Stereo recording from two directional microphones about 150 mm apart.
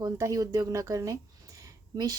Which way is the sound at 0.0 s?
25° right (ahead or behind).